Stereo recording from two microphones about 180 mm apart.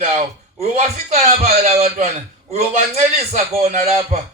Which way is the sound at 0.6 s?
35° right (ahead or behind).